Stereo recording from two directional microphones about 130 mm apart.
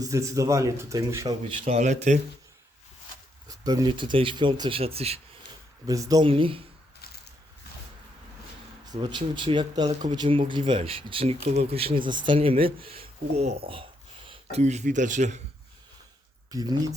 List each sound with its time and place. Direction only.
0.0 s a man's voice: 25° right (ahead or behind)
1.5 s speech: 55° right (ahead or behind)
3.6 s speech: 30° right (ahead or behind)
4.8 s speech: 50° right (ahead or behind)
5.8 s a man's voice: 25° right (ahead or behind)
6.2 s speech: 45° right (ahead or behind)
8.9 s speech: 35° right (ahead or behind)
14.5 s speech: 60° right (ahead or behind)
16.5 s a man's voice: 30° right (ahead or behind)